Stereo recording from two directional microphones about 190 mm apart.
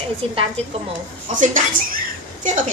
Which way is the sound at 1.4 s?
45° right (ahead or behind).